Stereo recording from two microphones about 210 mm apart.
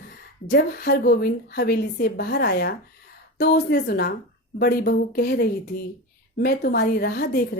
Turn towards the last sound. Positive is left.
turn(degrees=45)  # may be behind; listen again after turning